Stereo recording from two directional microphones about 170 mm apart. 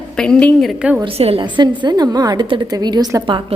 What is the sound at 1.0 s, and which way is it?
A woman's voice, 30° right (ahead or behind).